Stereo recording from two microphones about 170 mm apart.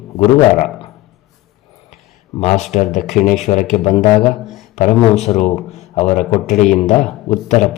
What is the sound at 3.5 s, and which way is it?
Speech, 25° left (ahead or behind).